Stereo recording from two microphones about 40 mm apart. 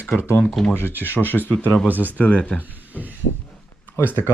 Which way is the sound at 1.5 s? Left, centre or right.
Left.